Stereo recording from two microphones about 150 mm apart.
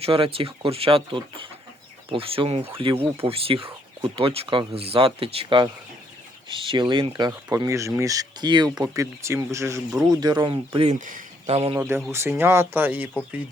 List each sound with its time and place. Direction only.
0.0 s speech: 40° right (ahead or behind)
11.0 s a sound: 60° right (ahead or behind)
11.8 s speech: 15° right (ahead or behind)